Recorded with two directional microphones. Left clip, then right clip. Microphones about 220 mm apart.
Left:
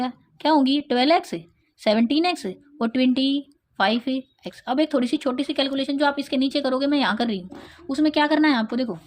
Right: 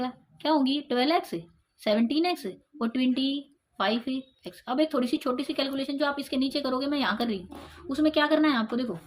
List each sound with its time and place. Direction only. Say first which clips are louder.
0.0 s speech: left 6 dB; 40° left (ahead or behind)